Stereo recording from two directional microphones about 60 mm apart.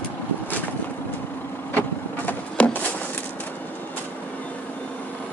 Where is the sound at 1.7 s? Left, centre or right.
Left.